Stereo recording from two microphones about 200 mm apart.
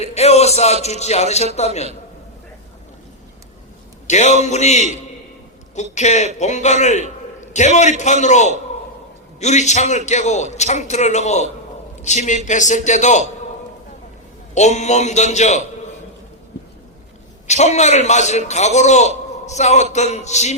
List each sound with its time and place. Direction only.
0.0 s music: 35° left (ahead or behind)
1.5 s a man's voice: 35° left (ahead or behind)
4.0 s a man's voice: 35° left (ahead or behind)
14.5 s a man's voice: 35° left (ahead or behind)
17.4 s a man's voice: 35° left (ahead or behind)